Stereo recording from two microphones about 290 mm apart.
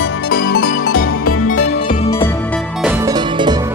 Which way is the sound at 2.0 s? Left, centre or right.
Centre.